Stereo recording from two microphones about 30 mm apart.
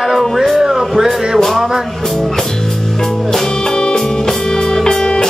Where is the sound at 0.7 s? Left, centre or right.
Centre.